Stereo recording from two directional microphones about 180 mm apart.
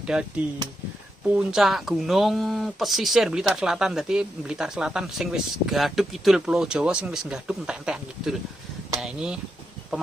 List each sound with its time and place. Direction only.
0.0 s speech: 5° right (ahead or behind)